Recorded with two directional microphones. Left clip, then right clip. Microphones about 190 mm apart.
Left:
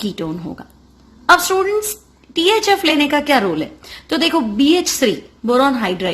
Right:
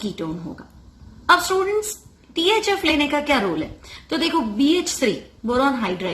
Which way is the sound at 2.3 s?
40° left (ahead or behind).